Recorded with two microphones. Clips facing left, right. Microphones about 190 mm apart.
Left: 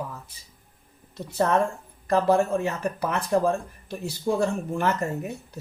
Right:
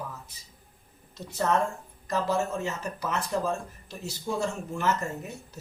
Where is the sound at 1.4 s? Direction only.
60° left (ahead or behind).